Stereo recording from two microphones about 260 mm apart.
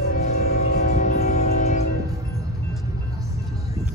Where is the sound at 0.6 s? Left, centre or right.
Left.